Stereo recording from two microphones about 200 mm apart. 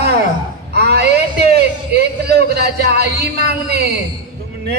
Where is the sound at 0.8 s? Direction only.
50° right (ahead or behind).